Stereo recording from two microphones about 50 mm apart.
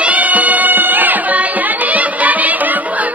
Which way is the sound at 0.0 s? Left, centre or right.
Right.